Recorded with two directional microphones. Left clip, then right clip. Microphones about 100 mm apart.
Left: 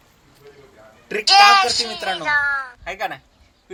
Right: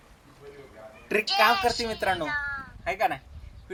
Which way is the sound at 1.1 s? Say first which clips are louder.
Left 1 dB; 30° right (ahead or behind).